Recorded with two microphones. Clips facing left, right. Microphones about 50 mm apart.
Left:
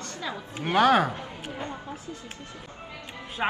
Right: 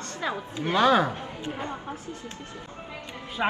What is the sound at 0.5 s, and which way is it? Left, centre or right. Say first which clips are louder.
Speech: left 1 dB; left.